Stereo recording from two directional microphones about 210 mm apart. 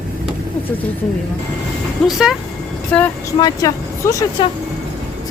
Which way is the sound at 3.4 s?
15° left (ahead or behind).